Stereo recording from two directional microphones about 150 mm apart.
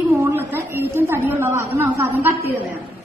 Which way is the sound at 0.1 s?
15° right (ahead or behind).